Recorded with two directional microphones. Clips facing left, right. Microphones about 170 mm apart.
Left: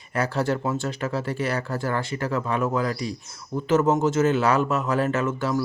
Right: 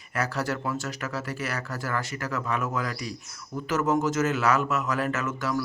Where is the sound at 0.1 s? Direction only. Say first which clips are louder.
Left 5 dB; 30° left (ahead or behind).